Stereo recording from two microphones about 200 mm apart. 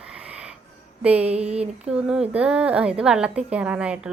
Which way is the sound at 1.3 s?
30° right (ahead or behind).